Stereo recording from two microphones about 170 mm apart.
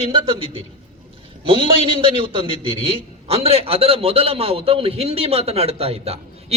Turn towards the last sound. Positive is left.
turn(degrees=-35)  # may be behind; listen again after turning